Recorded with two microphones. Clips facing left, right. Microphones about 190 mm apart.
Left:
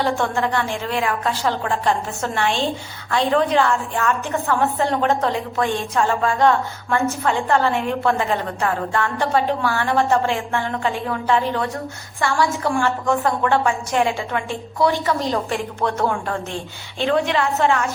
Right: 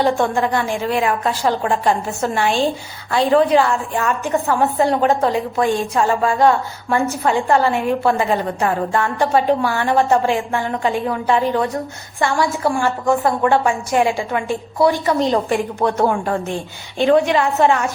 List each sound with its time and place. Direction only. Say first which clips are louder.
0.0 s a woman's voice: right 4 dB; 15° right (ahead or behind)